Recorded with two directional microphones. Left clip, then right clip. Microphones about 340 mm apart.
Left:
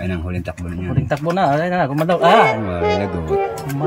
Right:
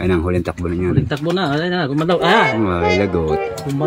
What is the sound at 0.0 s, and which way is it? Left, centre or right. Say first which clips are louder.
Speech: right 8 dB; centre.